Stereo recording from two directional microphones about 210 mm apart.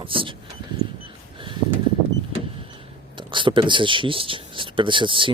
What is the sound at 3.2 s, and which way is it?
Speech, 25° right (ahead or behind).